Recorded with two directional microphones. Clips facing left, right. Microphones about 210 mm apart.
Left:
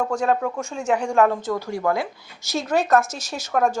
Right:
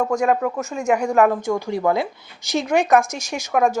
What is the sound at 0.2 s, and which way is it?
Speech, 5° right (ahead or behind).